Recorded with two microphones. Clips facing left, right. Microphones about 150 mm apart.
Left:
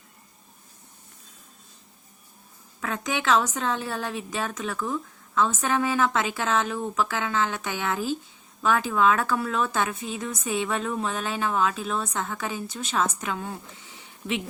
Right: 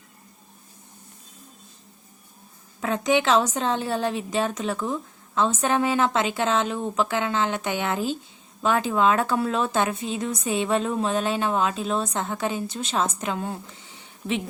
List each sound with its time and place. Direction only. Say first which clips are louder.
2.8 s a woman's voice: right 5 dB; 25° right (ahead or behind)